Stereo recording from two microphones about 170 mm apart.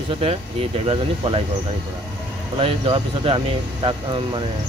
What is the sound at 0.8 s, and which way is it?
Speech, 35° right (ahead or behind).